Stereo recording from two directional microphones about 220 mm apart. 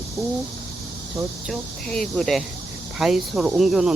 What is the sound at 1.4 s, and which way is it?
Speech, centre (ahead or behind).